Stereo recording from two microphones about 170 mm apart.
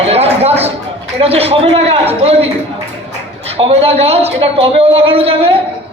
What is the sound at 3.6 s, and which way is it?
A man's voice, 35° right (ahead or behind).